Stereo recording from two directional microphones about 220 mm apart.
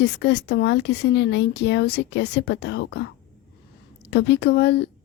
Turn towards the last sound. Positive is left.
turn(degrees=50)  # may be behind; listen again after turning